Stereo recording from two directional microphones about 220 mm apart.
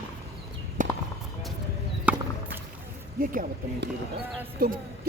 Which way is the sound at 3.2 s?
40° right (ahead or behind).